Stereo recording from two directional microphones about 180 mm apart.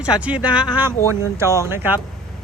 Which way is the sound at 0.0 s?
5° right (ahead or behind).